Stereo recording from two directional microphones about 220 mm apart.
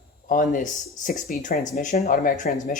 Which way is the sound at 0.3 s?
35° left (ahead or behind).